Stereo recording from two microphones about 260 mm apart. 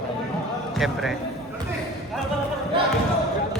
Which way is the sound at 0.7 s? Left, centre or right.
Centre.